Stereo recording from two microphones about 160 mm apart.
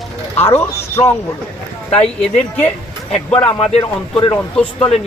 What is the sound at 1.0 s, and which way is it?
Speech, 40° left (ahead or behind).